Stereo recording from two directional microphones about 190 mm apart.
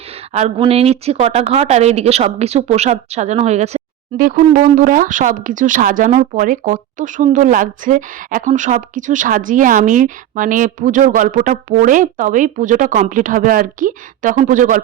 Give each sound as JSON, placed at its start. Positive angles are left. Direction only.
{"t": 0.6, "sound": "speech", "side_deg": -30}
{"t": 4.2, "sound": "speech", "side_deg": -45}